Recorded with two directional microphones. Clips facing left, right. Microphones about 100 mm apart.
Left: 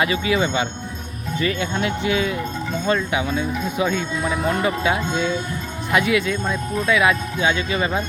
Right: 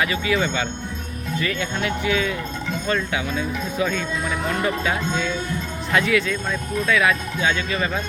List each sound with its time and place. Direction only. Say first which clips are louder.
0.0 s speech: left 2 dB; 25° left (ahead or behind)
4.2 s speech: left 3 dB; 30° left (ahead or behind)
4.6 s speech: left 2 dB; 20° left (ahead or behind)